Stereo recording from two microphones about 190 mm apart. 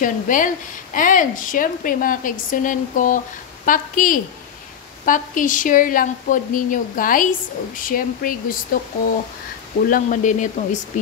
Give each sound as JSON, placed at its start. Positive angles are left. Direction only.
{"t": 0.0, "sound": "a woman's voice", "side_deg": 45}
{"t": 9.8, "sound": "speech", "side_deg": 45}